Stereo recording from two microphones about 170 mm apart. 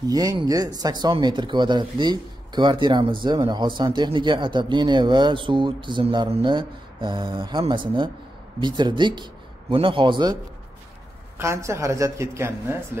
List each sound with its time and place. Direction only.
0.0 s speech: 20° right (ahead or behind)
11.3 s speech: 15° right (ahead or behind)